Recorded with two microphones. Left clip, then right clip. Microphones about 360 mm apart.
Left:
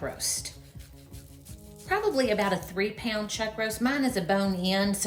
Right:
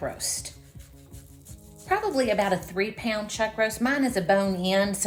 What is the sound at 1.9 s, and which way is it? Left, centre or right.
A woman's voice, centre.